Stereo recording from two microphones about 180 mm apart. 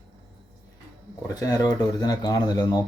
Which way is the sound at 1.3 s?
20° left (ahead or behind).